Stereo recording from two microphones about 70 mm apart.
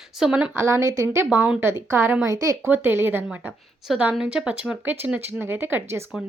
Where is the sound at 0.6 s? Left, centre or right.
Right.